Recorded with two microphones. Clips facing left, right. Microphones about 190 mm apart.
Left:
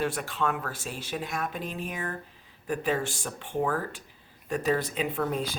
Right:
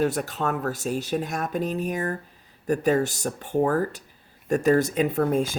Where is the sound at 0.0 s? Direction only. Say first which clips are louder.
Right 4 dB; 40° right (ahead or behind).